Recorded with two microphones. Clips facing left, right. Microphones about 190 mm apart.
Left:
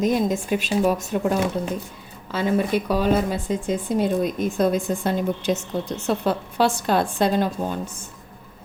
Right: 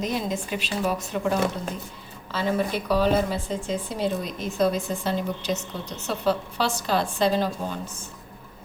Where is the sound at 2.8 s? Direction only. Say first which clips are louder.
Left 1 dB; 50° left (ahead or behind).